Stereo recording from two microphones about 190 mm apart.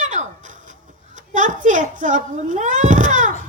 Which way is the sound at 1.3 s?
40° right (ahead or behind).